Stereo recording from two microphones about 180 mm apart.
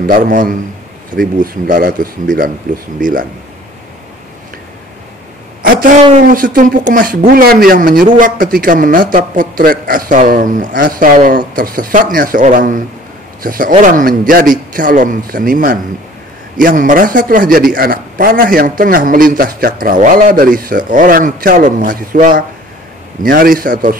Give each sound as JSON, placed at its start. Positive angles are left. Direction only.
{"t": 0.0, "sound": "speech", "side_deg": -50}
{"t": 5.6, "sound": "a sound", "side_deg": -50}
{"t": 6.3, "sound": "speech", "side_deg": -50}